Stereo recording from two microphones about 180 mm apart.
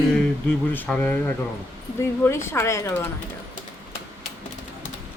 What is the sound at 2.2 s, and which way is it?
Speech, 15° left (ahead or behind).